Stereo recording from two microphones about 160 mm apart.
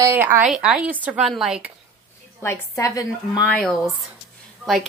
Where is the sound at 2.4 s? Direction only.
15° left (ahead or behind).